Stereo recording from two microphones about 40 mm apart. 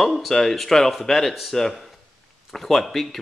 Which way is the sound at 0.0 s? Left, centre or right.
Centre.